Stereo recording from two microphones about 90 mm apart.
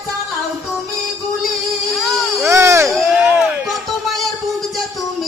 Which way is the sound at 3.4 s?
Centre (ahead or behind).